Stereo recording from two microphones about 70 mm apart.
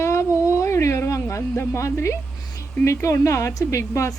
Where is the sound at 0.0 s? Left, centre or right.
Left.